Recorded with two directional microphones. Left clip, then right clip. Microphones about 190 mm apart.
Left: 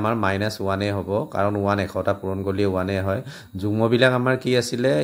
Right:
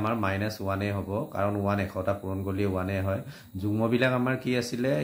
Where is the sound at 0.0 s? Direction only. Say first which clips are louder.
Left 6 dB; 45° left (ahead or behind).